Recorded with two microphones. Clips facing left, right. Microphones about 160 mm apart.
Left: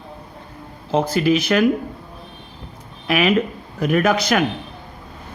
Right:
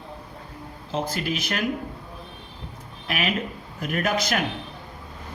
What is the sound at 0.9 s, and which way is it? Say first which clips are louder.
Speech: left 10 dB; 75° left (ahead or behind).